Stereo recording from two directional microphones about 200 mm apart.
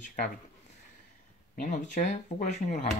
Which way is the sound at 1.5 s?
40° left (ahead or behind).